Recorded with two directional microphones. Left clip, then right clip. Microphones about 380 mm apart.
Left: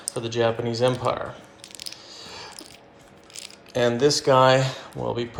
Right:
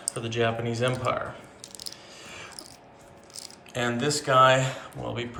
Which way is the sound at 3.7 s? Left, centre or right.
Centre.